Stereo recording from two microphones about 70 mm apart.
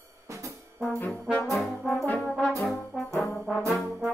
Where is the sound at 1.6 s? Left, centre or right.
Centre.